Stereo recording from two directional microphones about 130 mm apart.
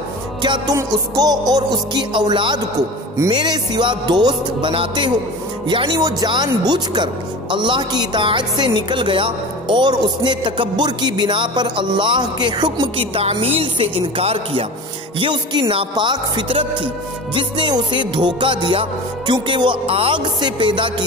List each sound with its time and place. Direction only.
0.4 s speech: 35° right (ahead or behind)